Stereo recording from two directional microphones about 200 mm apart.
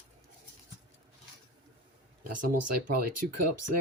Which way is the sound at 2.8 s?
50° right (ahead or behind).